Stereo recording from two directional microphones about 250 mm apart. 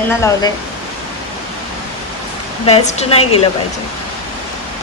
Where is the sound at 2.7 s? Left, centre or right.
Left.